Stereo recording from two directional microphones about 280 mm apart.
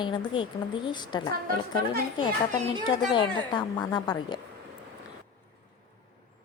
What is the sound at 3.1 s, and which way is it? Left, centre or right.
A woman's voice, centre.